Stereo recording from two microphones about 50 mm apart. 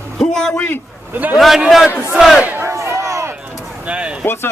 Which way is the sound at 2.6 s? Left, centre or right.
Right.